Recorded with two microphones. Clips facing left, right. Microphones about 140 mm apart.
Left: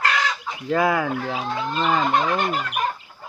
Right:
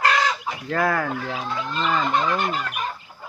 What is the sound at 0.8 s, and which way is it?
Speech, 10° left (ahead or behind).